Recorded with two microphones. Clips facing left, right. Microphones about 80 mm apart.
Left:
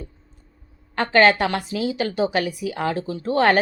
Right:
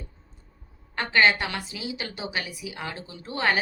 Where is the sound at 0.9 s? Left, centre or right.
Left.